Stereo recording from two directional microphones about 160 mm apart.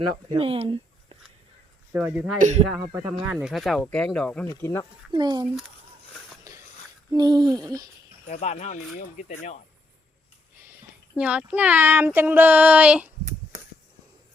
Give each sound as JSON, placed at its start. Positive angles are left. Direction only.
{"t": 0.3, "sound": "speech", "side_deg": -35}
{"t": 1.9, "sound": "speech", "side_deg": -10}
{"t": 2.4, "sound": "a man's voice", "side_deg": -45}
{"t": 3.2, "sound": "speech", "side_deg": -5}
{"t": 4.4, "sound": "speech", "side_deg": 20}
{"t": 5.1, "sound": "speech", "side_deg": -25}
{"t": 7.1, "sound": "speech", "side_deg": -25}
{"t": 8.3, "sound": "speech", "side_deg": 45}
{"t": 11.2, "sound": "speech", "side_deg": -10}